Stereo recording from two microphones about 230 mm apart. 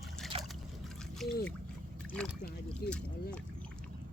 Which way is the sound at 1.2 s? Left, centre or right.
Centre.